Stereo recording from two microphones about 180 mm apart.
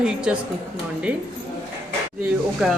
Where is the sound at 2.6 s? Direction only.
5° right (ahead or behind).